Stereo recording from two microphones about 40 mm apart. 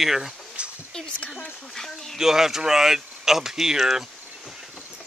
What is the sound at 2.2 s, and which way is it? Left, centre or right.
Speech, centre.